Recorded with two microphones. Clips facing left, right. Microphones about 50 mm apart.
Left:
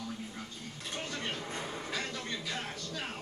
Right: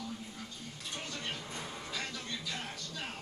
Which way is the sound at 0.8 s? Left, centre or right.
Left.